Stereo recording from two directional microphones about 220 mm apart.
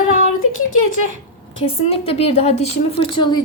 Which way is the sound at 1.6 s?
25° left (ahead or behind).